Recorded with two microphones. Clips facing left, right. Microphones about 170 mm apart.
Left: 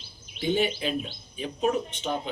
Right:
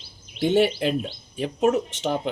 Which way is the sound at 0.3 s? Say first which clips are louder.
Right 6 dB; 75° right (ahead or behind).